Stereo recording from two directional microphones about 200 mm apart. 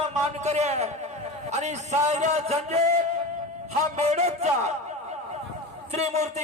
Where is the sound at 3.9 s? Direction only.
35° right (ahead or behind).